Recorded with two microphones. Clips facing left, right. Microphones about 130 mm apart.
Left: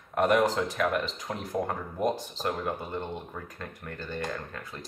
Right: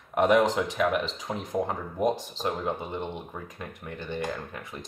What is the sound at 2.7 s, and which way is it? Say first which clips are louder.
Speech: right 2 dB; 15° right (ahead or behind).